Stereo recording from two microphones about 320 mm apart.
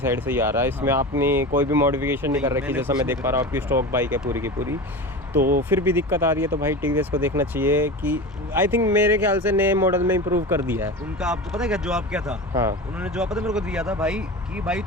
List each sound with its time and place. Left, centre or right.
0.0 s speech: centre
5.4 s speech: right
5.6 s speech: centre